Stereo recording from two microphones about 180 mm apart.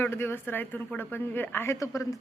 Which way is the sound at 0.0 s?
15° left (ahead or behind).